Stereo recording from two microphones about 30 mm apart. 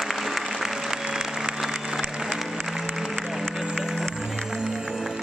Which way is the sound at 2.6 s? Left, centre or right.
Centre.